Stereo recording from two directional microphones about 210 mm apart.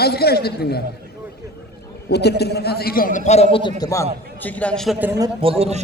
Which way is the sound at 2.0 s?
50° left (ahead or behind).